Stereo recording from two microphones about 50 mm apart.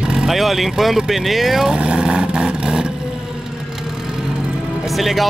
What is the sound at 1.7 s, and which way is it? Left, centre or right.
Vehicle, right.